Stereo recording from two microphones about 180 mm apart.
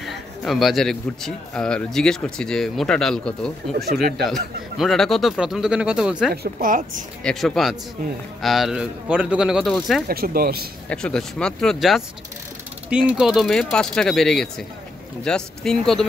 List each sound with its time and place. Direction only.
0.0 s a man's voice: centre (ahead or behind)
3.7 s speech: 60° right (ahead or behind)
4.0 s a man's voice: centre (ahead or behind)
6.3 s speech: 55° right (ahead or behind)
7.2 s a man's voice: centre (ahead or behind)
10.0 s speech: 55° right (ahead or behind)
10.9 s a man's voice: 5° left (ahead or behind)